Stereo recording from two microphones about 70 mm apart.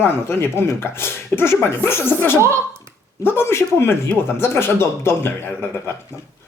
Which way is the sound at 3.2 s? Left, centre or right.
Left.